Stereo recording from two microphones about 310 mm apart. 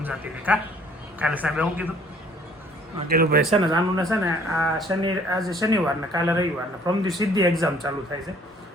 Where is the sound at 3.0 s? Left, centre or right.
Right.